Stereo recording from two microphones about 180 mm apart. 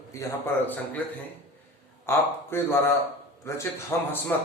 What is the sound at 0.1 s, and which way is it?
Speech, 15° left (ahead or behind).